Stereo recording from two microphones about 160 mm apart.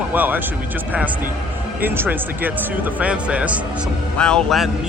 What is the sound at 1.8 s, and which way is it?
Speech, 10° right (ahead or behind).